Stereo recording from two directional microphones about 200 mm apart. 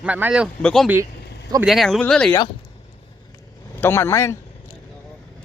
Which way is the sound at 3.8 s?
10° left (ahead or behind).